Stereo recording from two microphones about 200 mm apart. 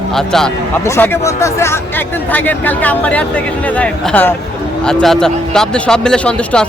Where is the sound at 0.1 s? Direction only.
Centre (ahead or behind).